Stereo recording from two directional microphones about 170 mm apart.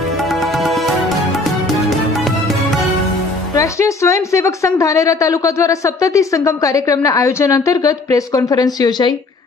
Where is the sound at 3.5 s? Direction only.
20° left (ahead or behind).